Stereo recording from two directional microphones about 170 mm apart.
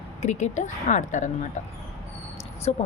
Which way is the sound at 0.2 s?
45° left (ahead or behind).